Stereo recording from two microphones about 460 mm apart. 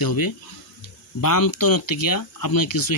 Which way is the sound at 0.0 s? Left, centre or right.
Left.